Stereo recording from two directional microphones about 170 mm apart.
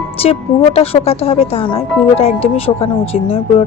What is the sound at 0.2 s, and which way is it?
Speech, 35° left (ahead or behind).